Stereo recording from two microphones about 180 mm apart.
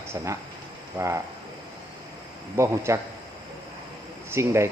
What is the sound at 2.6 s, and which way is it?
Speech, 15° right (ahead or behind).